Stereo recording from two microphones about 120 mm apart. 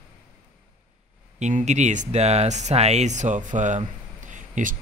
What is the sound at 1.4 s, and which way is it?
Speech, 75° right (ahead or behind).